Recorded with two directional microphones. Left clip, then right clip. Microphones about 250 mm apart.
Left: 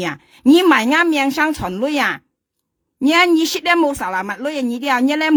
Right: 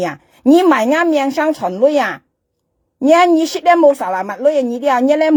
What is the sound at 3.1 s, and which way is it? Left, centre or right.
Speech, left.